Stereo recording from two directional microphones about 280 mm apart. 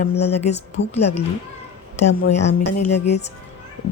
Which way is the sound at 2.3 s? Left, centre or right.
Left.